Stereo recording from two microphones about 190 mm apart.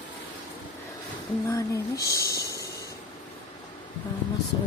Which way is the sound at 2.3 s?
15° left (ahead or behind).